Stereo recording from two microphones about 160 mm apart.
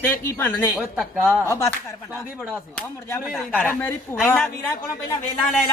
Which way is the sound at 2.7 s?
15° left (ahead or behind).